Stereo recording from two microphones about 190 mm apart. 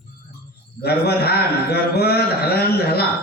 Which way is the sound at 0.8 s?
55° left (ahead or behind).